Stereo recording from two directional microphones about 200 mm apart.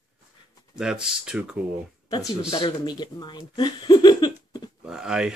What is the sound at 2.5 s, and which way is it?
Speech, 20° left (ahead or behind).